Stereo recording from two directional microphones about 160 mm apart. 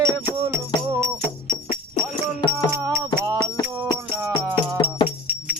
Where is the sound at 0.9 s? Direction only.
20° right (ahead or behind).